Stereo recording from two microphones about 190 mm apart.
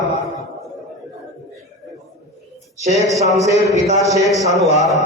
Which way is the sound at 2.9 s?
15° right (ahead or behind).